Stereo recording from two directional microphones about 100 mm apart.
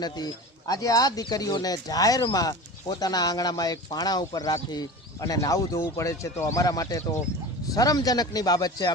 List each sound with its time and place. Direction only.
0.7 s speech: 40° left (ahead or behind)